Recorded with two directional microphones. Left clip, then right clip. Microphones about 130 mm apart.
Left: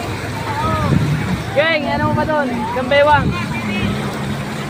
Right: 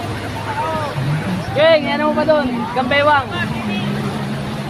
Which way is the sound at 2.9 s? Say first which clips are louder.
Left 2 dB; 35° right (ahead or behind).